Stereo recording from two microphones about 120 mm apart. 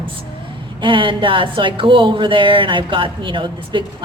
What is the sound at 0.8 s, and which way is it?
Speech, 45° right (ahead or behind).